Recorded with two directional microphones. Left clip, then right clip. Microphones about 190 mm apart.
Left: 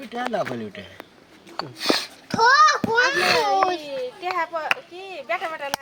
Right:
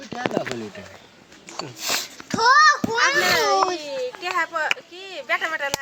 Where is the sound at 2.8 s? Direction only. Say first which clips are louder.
Even; 15° left (ahead or behind).